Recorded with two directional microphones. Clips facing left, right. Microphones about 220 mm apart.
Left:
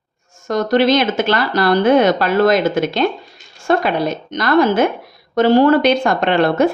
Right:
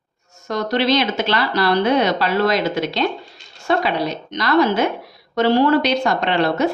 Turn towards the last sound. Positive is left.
turn(degrees=50)  # may be behind; listen again after turning